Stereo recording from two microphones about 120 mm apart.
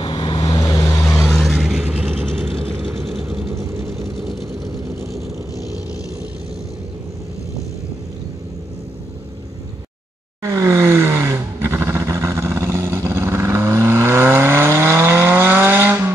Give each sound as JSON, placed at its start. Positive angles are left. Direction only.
{"t": 0.0, "sound": "vehicle", "side_deg": 40}
{"t": 1.0, "sound": "vehicle", "side_deg": 0}
{"t": 3.0, "sound": "vehicle", "side_deg": 0}
{"t": 10.4, "sound": "vehicle", "side_deg": -25}